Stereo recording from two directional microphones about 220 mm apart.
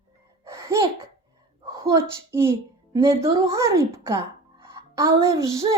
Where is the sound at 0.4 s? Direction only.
15° right (ahead or behind).